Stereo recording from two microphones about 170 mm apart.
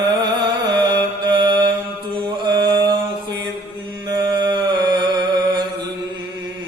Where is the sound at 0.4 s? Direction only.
25° right (ahead or behind).